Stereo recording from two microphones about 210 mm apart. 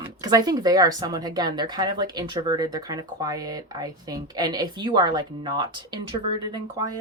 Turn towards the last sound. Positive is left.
turn(degrees=-15)  # may be behind; listen again after turning